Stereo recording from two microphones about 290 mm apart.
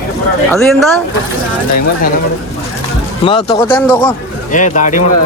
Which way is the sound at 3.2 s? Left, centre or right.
Centre.